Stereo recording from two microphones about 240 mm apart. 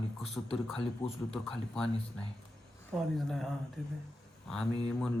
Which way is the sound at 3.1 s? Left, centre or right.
Centre.